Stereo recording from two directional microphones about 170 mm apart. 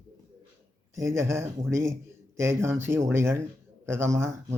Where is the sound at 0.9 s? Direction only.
15° right (ahead or behind).